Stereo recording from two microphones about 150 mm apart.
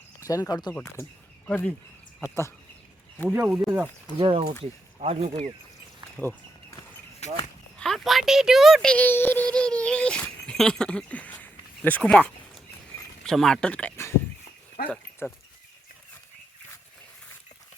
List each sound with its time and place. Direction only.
0.2 s speech: 25° left (ahead or behind)
1.5 s speech: 10° left (ahead or behind)
3.3 s speech: 10° right (ahead or behind)
4.2 s speech: 40° right (ahead or behind)
6.2 s speech: 10° left (ahead or behind)
7.2 s speech: 50° left (ahead or behind)
7.8 s speech: centre (ahead or behind)
14.8 s speech: 80° left
15.2 s speech: 15° left (ahead or behind)